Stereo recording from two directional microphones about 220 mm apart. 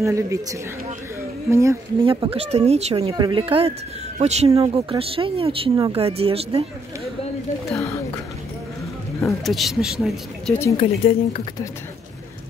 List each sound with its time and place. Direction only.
0.0 s a woman's voice: 15° right (ahead or behind)
2.0 s speech: 25° right (ahead or behind)
9.4 s speech: centre (ahead or behind)
10.8 s speech: 25° left (ahead or behind)